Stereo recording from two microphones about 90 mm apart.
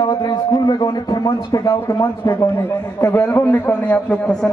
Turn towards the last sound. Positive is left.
turn(degrees=15)  # may be behind; listen again after turning